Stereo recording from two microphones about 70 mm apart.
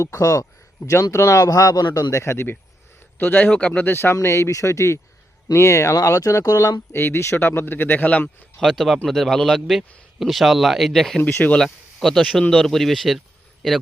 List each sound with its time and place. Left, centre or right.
0.0 s speech: left
1.9 s speech: left
3.2 s a man's voice: left
3.8 s speech: left
6.9 s speech: left
8.5 s speech: centre
11.3 s speech: centre